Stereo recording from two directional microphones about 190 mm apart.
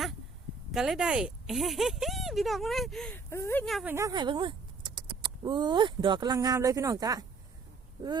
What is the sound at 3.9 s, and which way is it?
Speech, 20° right (ahead or behind).